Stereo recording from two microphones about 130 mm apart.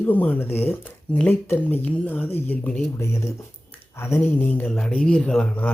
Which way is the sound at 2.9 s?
20° left (ahead or behind).